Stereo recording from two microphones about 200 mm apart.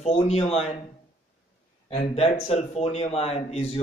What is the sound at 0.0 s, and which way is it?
Speech, 30° left (ahead or behind).